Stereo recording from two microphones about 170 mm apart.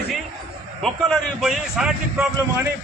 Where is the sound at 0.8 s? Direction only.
Centre (ahead or behind).